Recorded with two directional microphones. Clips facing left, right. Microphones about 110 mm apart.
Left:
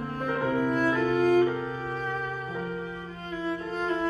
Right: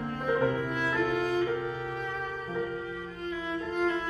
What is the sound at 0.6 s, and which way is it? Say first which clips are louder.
Music: left 5 dB; 40° left (ahead or behind).